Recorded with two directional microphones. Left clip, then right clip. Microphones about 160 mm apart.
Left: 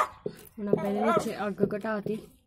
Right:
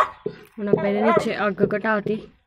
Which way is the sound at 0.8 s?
10° left (ahead or behind).